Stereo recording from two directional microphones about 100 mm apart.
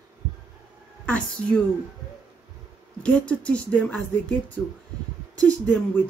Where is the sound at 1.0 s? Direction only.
10° left (ahead or behind).